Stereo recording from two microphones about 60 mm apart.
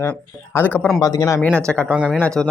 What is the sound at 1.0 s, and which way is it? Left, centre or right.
Speech, left.